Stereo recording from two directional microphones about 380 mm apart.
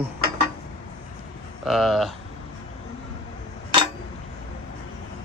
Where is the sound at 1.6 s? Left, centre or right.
Centre.